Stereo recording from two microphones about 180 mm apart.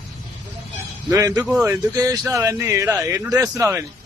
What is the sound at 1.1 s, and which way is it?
A man's voice, 15° right (ahead or behind).